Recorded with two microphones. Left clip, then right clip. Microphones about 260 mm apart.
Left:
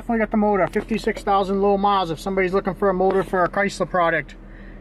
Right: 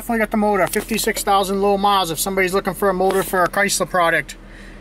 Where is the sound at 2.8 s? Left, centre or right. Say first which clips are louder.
Right 2 dB; left.